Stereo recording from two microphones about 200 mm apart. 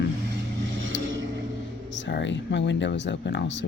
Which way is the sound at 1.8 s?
65° left (ahead or behind).